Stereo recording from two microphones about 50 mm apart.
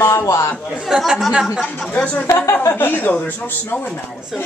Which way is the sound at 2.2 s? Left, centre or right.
Left.